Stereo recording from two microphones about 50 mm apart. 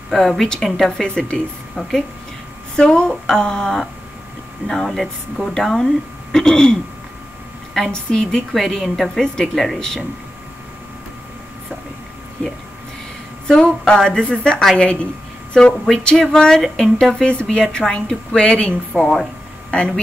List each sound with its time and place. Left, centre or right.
0.1 s speech: centre
1.0 s a woman's voice: centre
1.8 s speech: centre
2.7 s speech: centre
13.8 s a woman's voice: centre
18.9 s speech: centre